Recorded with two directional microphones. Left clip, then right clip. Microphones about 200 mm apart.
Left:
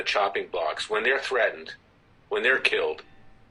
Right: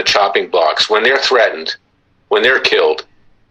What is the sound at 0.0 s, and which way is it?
Speech, 40° right (ahead or behind).